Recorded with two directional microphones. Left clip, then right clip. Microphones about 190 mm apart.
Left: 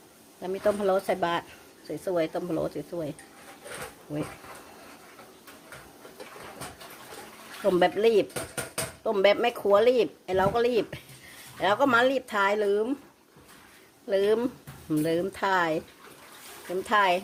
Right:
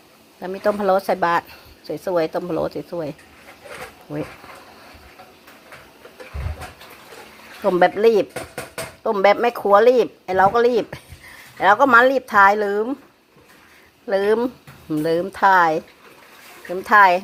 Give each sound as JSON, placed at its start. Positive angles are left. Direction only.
{"t": 0.4, "sound": "speech", "side_deg": -15}
{"t": 7.6, "sound": "speech", "side_deg": -15}
{"t": 14.1, "sound": "speech", "side_deg": -15}
{"t": 16.8, "sound": "speech", "side_deg": -15}